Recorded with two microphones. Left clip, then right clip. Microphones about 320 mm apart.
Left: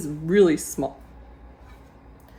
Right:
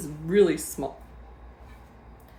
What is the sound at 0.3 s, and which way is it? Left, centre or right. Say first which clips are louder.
Speech: left 3 dB; left.